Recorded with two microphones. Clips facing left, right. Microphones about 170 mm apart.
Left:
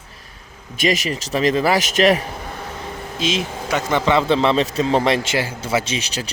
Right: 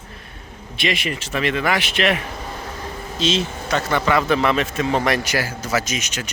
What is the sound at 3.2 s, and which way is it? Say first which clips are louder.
A man's voice: right 1 dB; 10° left (ahead or behind).